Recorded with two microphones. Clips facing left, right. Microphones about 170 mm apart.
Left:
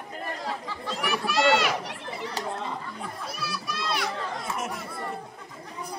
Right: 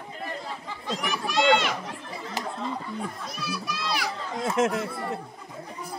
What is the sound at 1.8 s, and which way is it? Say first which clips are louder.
Chatter: left 2 dB; 75° left (ahead or behind).